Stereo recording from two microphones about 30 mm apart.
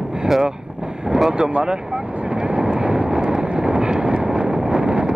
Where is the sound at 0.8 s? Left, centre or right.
Right.